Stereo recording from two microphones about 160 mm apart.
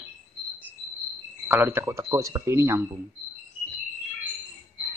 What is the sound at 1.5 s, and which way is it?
Speech, 15° right (ahead or behind).